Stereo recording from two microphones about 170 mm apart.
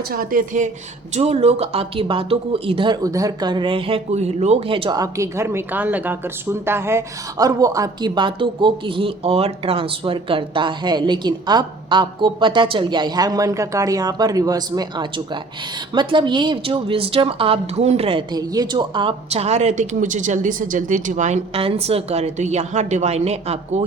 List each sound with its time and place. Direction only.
0.1 s speech: 55° right (ahead or behind)
1.1 s speech: 35° right (ahead or behind)
18.3 s speech: 25° right (ahead or behind); by 23.8 s 40° right (ahead or behind)